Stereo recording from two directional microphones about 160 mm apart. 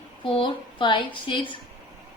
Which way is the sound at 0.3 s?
30° left (ahead or behind).